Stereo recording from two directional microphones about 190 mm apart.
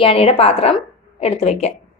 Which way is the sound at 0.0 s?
30° left (ahead or behind).